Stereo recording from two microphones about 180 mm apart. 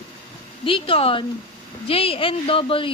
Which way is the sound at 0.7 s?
30° left (ahead or behind).